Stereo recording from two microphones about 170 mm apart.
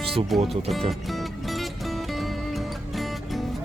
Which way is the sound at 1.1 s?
Centre (ahead or behind).